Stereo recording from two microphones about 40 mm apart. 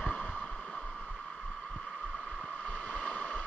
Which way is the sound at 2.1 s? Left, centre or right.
Left.